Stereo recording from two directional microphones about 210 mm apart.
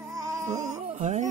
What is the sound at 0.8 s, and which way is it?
Music, 35° right (ahead or behind).